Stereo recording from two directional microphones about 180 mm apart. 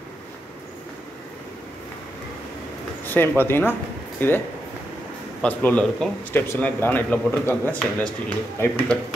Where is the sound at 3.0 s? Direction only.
10° left (ahead or behind).